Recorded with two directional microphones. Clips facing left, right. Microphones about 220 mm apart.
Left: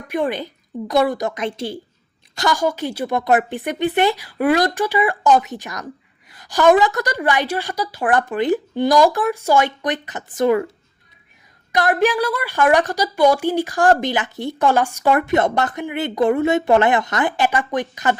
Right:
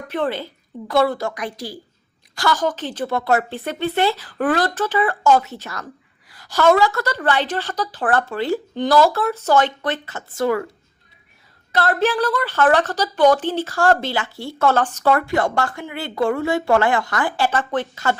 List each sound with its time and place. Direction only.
0.1 s a woman's voice: 15° left (ahead or behind)
11.7 s a woman's voice: 15° left (ahead or behind)